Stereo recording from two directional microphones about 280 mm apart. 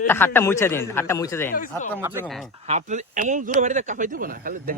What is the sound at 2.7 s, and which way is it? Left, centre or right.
Speech, right.